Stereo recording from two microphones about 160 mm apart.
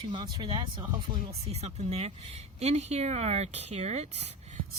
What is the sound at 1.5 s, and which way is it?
Speech, 40° right (ahead or behind).